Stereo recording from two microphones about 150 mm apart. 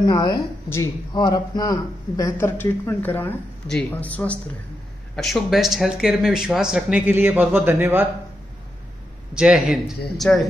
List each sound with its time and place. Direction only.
0.0 s a woman's voice: 30° left (ahead or behind); by 8.1 s 15° right (ahead or behind)
9.3 s speech: 5° right (ahead or behind)